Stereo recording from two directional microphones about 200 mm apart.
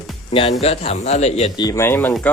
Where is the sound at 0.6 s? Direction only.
30° left (ahead or behind); by 2.3 s 10° left (ahead or behind).